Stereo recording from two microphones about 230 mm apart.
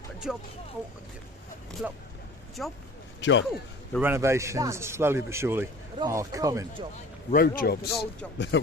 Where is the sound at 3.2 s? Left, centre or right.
Left.